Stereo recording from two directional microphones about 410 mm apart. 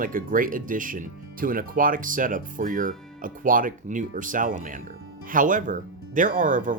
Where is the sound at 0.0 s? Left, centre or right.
Centre.